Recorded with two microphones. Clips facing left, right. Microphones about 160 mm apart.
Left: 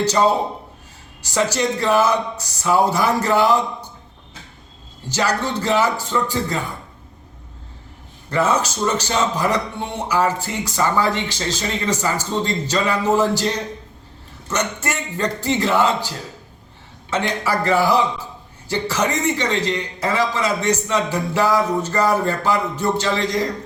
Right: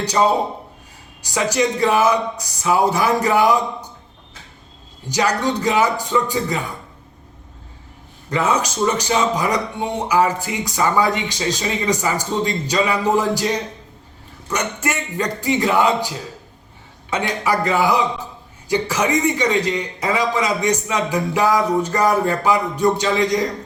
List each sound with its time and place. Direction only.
1.2 s a man's voice: 15° right (ahead or behind)
5.0 s a man's voice: 15° right (ahead or behind)
8.3 s a man's voice: 15° right (ahead or behind)
14.5 s a man's voice: 10° right (ahead or behind)